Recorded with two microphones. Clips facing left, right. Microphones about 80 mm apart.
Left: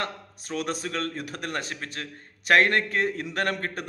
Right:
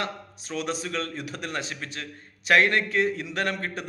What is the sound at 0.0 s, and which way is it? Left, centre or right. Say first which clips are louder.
A man's voice: even; left.